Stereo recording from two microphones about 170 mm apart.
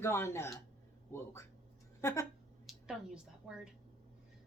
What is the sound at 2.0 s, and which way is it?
Speech, 15° left (ahead or behind).